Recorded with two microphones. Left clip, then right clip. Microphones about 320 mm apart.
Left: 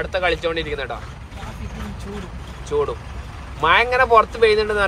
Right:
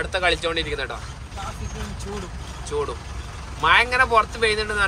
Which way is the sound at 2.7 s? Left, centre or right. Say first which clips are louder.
Left 5 dB; centre.